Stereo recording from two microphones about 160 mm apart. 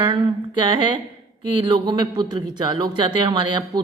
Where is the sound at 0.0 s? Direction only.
30° right (ahead or behind).